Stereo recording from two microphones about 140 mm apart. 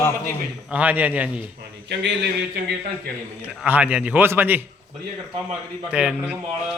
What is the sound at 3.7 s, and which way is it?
Speech, 10° right (ahead or behind).